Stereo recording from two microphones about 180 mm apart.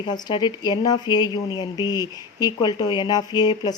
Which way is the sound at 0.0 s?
25° left (ahead or behind).